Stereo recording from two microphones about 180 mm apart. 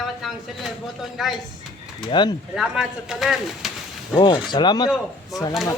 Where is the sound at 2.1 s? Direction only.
25° left (ahead or behind).